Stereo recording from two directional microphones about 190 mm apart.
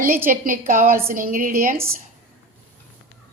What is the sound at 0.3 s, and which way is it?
A woman's voice, 45° right (ahead or behind).